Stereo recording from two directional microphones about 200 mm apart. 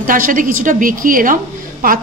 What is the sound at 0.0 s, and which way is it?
A woman's voice, 40° right (ahead or behind).